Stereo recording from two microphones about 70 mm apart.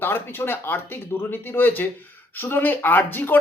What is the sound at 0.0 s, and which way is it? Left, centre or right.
A man's voice, left.